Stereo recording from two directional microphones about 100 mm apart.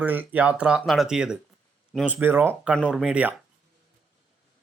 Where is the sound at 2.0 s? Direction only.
20° right (ahead or behind).